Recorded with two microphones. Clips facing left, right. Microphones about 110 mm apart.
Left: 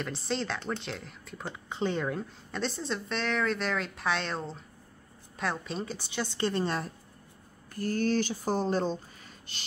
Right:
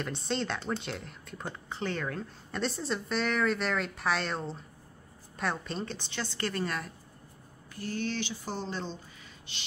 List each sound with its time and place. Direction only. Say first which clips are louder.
0.0 s a woman's voice: even; centre (ahead or behind)
1.7 s a woman's voice: left 4 dB; 20° left (ahead or behind)
2.5 s a woman's voice: even; centre (ahead or behind); by 6.9 s 30° left (ahead or behind)
7.7 s speech: left 6 dB; 45° left (ahead or behind)